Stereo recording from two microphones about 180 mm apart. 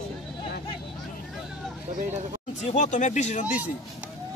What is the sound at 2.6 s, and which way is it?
Speech, 40° left (ahead or behind).